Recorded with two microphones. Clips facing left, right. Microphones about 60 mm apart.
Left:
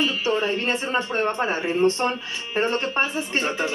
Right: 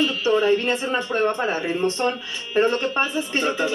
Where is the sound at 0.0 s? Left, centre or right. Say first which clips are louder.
Right 3 dB; left.